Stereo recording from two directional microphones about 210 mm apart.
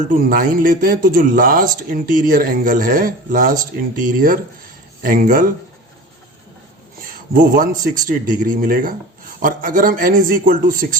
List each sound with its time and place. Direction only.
0.1 s speech: 40° right (ahead or behind)
7.0 s speech: 40° right (ahead or behind)